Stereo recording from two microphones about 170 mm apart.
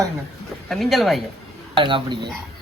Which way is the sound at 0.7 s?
Centre (ahead or behind).